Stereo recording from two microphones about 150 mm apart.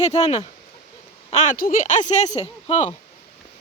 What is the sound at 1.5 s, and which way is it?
Speech, 65° left (ahead or behind).